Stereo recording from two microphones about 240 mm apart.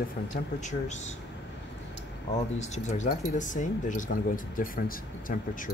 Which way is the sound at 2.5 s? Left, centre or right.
Left.